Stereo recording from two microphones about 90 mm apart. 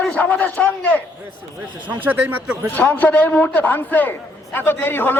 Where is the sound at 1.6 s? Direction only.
15° right (ahead or behind).